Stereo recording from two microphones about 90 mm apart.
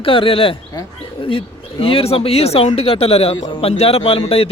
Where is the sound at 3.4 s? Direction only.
75° left (ahead or behind); by 4.5 s 90° left.